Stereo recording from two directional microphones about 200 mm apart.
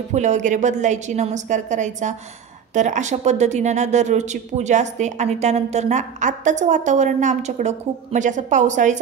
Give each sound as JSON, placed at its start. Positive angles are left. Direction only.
{"t": 0.1, "sound": "speech", "side_deg": -35}